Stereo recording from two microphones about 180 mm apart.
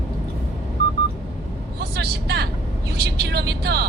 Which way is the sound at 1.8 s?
60° right (ahead or behind).